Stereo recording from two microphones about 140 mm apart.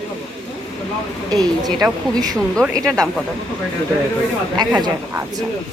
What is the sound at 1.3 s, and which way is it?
A woman's voice, 30° right (ahead or behind).